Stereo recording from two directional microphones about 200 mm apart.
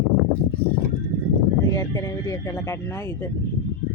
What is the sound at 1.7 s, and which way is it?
Speech, 15° left (ahead or behind).